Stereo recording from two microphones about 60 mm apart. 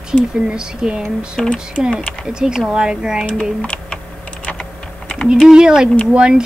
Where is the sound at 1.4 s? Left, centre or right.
Centre.